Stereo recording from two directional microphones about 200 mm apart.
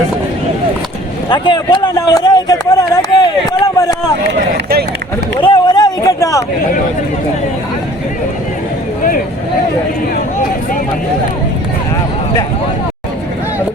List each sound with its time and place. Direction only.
1.3 s speech: 20° left (ahead or behind)
4.5 s run: 55° right (ahead or behind)
5.4 s a sound: 25° left (ahead or behind)